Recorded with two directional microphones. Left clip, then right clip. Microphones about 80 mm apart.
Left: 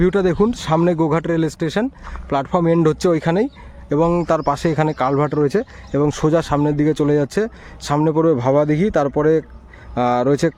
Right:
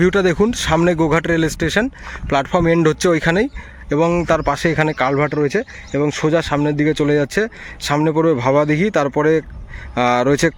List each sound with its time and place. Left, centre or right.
0.0 s speech: centre
3.9 s a man's voice: left
6.0 s speech: left
6.3 s a man's voice: left
6.6 s speech: left; by 10.5 s centre